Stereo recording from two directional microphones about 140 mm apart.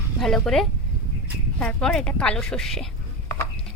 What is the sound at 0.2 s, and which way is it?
A woman's voice, centre (ahead or behind).